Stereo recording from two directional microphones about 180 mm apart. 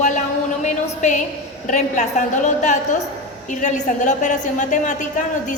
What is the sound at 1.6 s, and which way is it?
A woman's voice, 40° left (ahead or behind).